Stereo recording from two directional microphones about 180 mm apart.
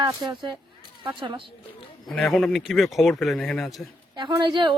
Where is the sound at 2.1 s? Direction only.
5° left (ahead or behind).